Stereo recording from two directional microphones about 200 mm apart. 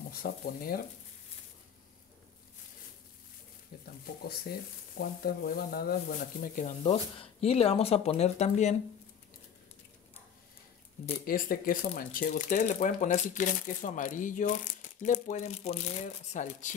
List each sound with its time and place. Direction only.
0.1 s speech: 45° left (ahead or behind)
4.0 s speech: 50° left (ahead or behind)
6.8 s speech: 30° left (ahead or behind)
11.2 s speech: 45° left (ahead or behind)